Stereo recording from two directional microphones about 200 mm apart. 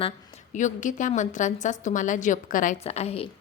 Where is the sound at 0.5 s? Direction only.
40° left (ahead or behind).